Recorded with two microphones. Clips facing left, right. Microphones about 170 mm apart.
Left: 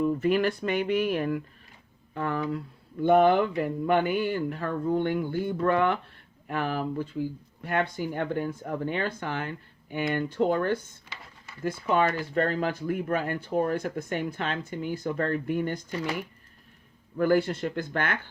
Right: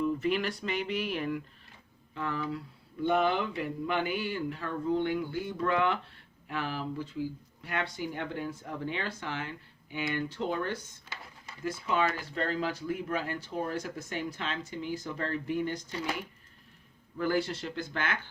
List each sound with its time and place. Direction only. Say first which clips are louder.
0.0 s speech: left 5 dB; 45° left (ahead or behind)
17.2 s speech: left 6 dB; 50° left (ahead or behind)